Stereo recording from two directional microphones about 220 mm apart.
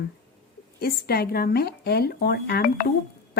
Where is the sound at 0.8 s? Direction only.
45° left (ahead or behind).